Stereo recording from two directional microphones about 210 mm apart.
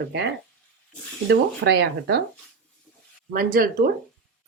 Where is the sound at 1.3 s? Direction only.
55° right (ahead or behind).